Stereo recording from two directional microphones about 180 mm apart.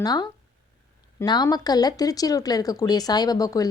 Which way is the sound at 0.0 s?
20° left (ahead or behind).